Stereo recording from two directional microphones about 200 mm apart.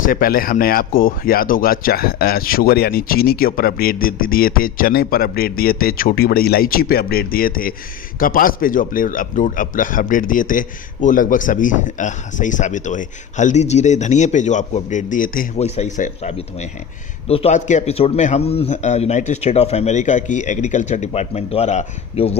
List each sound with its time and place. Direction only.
0.0 s a man's voice: 45° left (ahead or behind)